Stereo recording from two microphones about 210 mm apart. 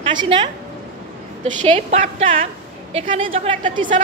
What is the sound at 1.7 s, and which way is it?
Speech, 35° right (ahead or behind).